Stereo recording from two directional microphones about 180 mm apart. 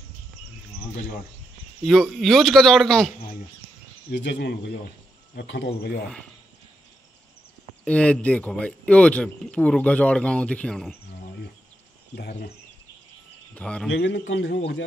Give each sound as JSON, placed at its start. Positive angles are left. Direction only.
{"t": 1.8, "sound": "a man's voice", "side_deg": 0}
{"t": 4.1, "sound": "a man's voice", "side_deg": 70}
{"t": 5.8, "sound": "speech", "side_deg": 60}
{"t": 7.8, "sound": "speech", "side_deg": 5}
{"t": 12.2, "sound": "speech", "side_deg": 65}
{"t": 13.6, "sound": "a man's voice", "side_deg": 5}
{"t": 13.9, "sound": "a man's voice", "side_deg": 70}